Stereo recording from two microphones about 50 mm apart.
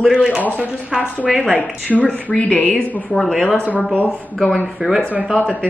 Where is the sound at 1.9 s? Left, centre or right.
Left.